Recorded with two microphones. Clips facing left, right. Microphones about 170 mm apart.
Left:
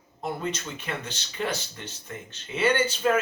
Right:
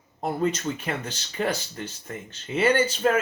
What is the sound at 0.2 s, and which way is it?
Speech, 45° right (ahead or behind).